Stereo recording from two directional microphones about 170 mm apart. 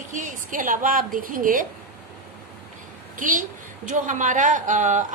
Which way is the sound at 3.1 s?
50° right (ahead or behind).